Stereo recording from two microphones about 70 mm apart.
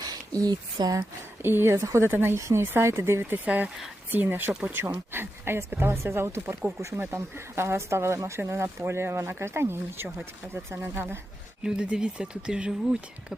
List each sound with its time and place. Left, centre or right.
0.4 s speech: right
1.4 s speech: right
1.8 s speech: right
11.6 s speech: centre